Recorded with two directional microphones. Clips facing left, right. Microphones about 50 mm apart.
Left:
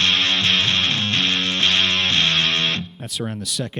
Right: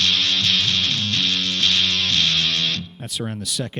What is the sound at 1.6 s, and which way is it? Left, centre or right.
Music, left.